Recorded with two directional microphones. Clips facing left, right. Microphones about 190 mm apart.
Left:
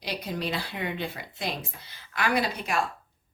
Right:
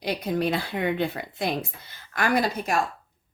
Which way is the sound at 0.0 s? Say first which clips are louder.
Right 7 dB; 50° right (ahead or behind).